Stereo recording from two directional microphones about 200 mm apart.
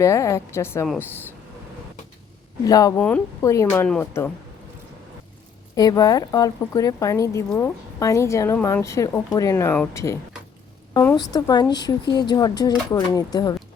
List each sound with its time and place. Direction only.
0.0 s a woman's voice: 15° left (ahead or behind)
2.6 s a woman's voice: 20° left (ahead or behind)
5.7 s a woman's voice: 20° left (ahead or behind)